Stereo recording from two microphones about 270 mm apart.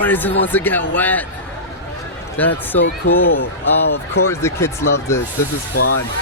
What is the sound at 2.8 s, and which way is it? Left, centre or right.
Speech, left.